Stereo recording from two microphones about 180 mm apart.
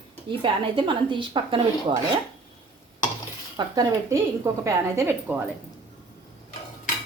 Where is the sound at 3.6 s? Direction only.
20° right (ahead or behind).